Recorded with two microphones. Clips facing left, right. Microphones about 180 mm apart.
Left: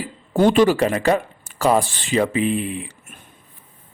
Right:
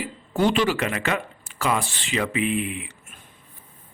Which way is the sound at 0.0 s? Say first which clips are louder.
Left 5 dB; 45° left (ahead or behind).